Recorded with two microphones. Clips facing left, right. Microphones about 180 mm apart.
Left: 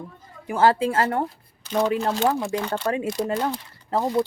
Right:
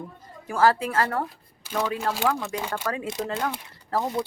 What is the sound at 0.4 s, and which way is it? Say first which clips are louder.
Speech: left 2 dB; 25° left (ahead or behind).